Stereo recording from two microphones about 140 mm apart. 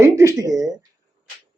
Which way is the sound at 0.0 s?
20° right (ahead or behind).